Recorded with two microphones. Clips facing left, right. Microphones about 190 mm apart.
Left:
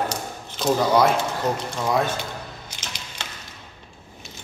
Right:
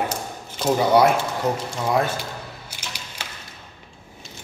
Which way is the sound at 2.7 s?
10° right (ahead or behind).